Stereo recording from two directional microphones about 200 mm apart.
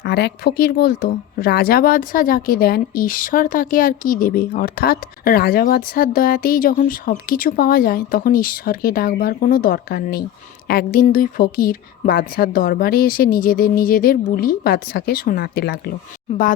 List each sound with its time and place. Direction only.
0.0 s speech: 55° left (ahead or behind)